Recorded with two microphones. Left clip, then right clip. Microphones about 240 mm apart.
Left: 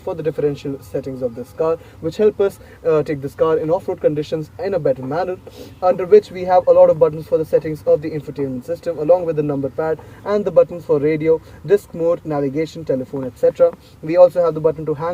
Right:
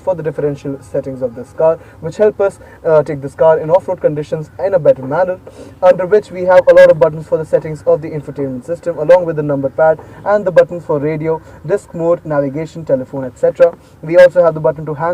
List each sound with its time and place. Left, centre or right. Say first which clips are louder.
0.1 s speech: right 4 dB; left